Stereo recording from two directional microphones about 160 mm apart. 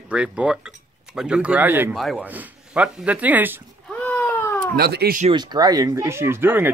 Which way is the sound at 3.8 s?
10° left (ahead or behind).